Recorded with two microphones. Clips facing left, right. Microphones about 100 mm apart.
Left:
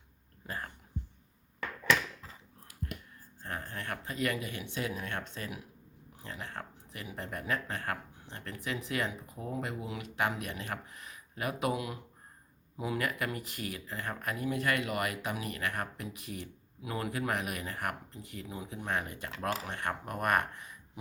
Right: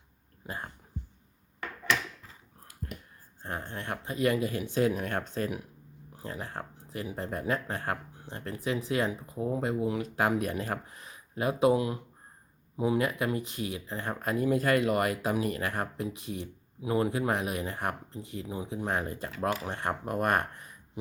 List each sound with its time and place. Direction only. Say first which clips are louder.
0.4 s speech: right 1 dB; 20° right (ahead or behind)
2.8 s a sound: even; 35° right (ahead or behind)
3.4 s speech: right 3 dB; 30° right (ahead or behind); by 5.6 s 45° right (ahead or behind)
6.1 s speech: right 4 dB; 35° right (ahead or behind)